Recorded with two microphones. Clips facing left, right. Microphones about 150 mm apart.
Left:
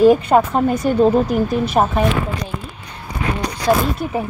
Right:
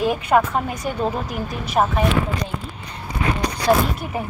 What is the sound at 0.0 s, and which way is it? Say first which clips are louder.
Speech: left 7 dB; 35° left (ahead or behind).